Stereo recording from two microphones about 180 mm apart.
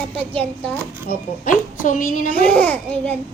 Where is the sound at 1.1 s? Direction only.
45° left (ahead or behind).